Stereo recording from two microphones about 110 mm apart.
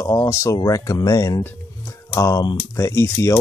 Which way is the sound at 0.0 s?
30° left (ahead or behind).